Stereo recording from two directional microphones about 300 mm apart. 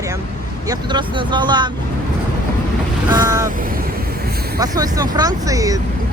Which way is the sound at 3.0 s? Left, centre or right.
Centre.